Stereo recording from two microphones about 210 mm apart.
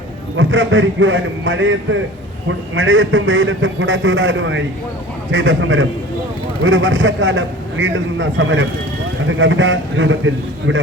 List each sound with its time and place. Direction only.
0.3 s a man's voice: 65° right (ahead or behind)